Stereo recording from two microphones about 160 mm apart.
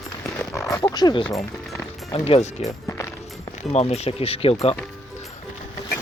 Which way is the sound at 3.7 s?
40° left (ahead or behind).